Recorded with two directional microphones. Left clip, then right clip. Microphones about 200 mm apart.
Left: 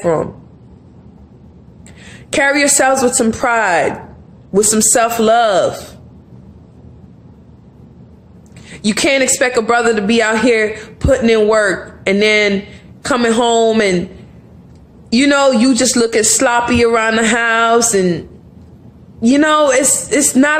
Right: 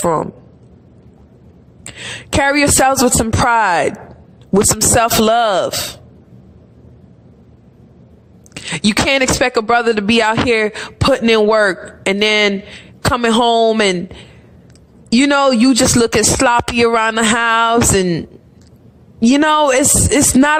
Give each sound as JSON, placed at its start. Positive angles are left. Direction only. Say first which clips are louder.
{"t": 0.0, "sound": "a man's voice", "louder": "left 1 dB", "side_deg": -45}
{"t": 1.8, "sound": "a woman's voice", "louder": "right 11 dB", "side_deg": -45}
{"t": 8.6, "sound": "a man's voice", "louder": "even", "side_deg": -45}
{"t": 15.1, "sound": "a man's voice", "louder": "left 1 dB", "side_deg": -45}